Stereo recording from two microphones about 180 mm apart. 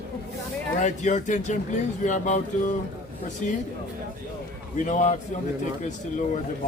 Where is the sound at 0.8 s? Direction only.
40° left (ahead or behind).